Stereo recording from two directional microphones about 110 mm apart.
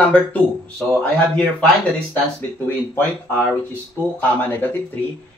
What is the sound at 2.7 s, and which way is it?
Speech, 15° left (ahead or behind).